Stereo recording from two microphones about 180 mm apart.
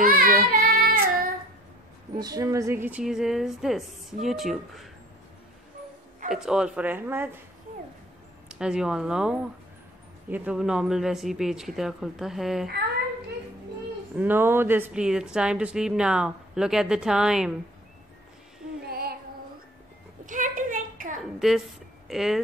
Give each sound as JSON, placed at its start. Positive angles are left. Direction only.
{"t": 0.0, "sound": "child singing", "side_deg": -50}
{"t": 0.5, "sound": "female singing", "side_deg": -55}
{"t": 2.1, "sound": "a woman's voice", "side_deg": -20}
{"t": 6.3, "sound": "speech", "side_deg": -5}
{"t": 8.5, "sound": "a woman's voice", "side_deg": -5}
{"t": 14.1, "sound": "a woman's voice", "side_deg": -10}
{"t": 18.9, "sound": "female singing", "side_deg": -60}
{"t": 20.2, "sound": "a sound", "side_deg": -45}
{"t": 21.4, "sound": "speech", "side_deg": 0}